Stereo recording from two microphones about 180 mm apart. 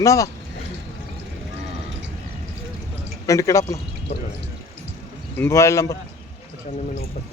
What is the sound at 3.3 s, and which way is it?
Speech, 15° left (ahead or behind).